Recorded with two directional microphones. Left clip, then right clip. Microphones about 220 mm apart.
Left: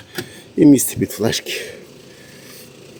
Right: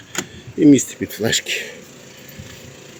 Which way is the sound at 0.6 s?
30° left (ahead or behind).